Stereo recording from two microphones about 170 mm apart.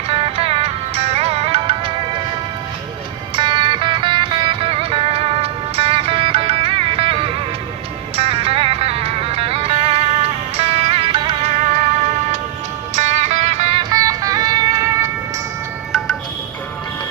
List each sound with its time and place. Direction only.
0.1 s music: 35° right (ahead or behind)
3.3 s music: 30° right (ahead or behind)
12.9 s music: 45° right (ahead or behind)
13.9 s music: 20° right (ahead or behind)